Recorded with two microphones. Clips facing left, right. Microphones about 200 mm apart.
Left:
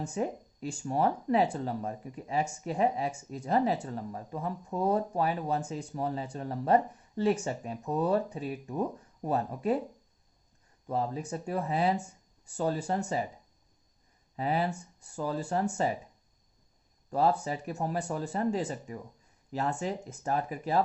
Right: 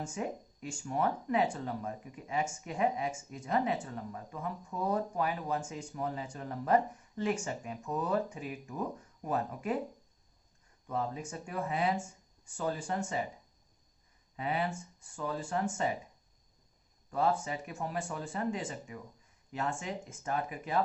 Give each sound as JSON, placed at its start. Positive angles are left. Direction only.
{"t": 0.0, "sound": "speech", "side_deg": 35}
{"t": 10.8, "sound": "speech", "side_deg": 35}
{"t": 14.3, "sound": "speech", "side_deg": 35}
{"t": 17.1, "sound": "speech", "side_deg": 35}